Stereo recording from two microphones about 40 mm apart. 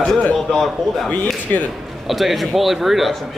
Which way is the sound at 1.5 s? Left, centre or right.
Left.